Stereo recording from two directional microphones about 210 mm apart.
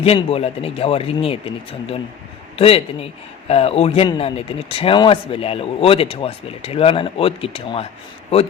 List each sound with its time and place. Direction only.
0.0 s speech: 30° left (ahead or behind)
2.6 s speech: 30° left (ahead or behind)